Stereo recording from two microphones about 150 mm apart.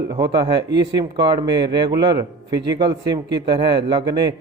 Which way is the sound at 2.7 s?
30° right (ahead or behind).